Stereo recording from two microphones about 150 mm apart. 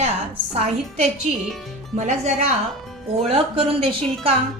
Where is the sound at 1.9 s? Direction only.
50° right (ahead or behind).